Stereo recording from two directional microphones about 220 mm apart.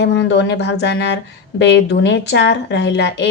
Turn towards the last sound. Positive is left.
turn(degrees=50)  # may be behind; listen again after turning